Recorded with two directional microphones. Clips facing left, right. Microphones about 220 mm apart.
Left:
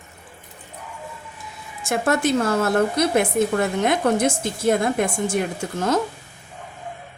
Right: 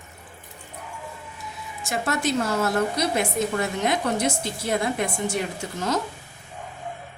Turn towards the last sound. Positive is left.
turn(degrees=50)  # may be behind; listen again after turning